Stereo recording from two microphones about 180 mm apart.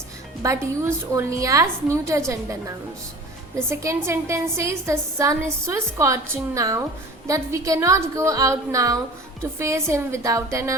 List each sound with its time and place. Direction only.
0.4 s a woman's voice: 15° right (ahead or behind)